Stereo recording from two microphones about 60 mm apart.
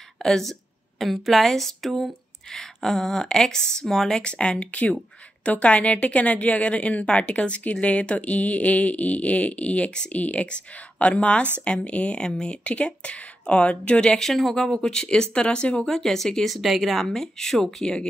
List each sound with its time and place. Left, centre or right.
0.2 s a woman's voice: centre